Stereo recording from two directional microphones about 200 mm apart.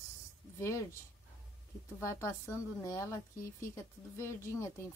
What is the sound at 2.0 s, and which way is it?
A woman's voice, 15° left (ahead or behind).